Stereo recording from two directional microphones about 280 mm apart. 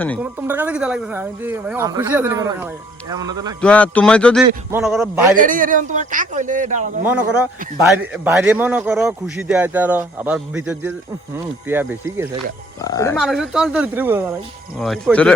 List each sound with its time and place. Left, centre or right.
0.2 s speech: centre
3.6 s a man's voice: centre
5.4 s a man's voice: right
7.9 s a man's voice: centre
12.8 s speech: centre
13.2 s a man's voice: centre